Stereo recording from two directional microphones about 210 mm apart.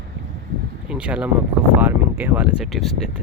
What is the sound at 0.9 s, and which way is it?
Speech, 5° right (ahead or behind).